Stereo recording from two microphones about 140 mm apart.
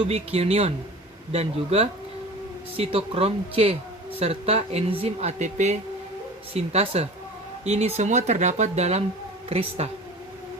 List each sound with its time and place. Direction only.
0.1 s speech: 45° right (ahead or behind)